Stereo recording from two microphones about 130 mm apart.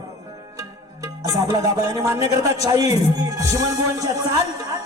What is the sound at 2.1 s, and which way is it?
Speech, 55° left (ahead or behind).